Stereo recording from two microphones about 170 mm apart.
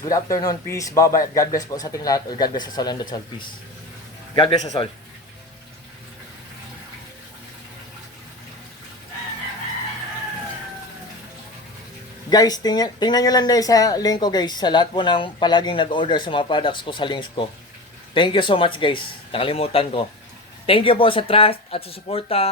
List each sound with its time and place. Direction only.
0.0 s speech: 20° left (ahead or behind)
4.4 s speech: 30° left (ahead or behind)
12.3 s speech: 25° left (ahead or behind)